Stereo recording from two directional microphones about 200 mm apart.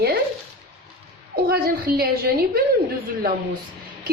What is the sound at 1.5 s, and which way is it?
Speech, 50° right (ahead or behind).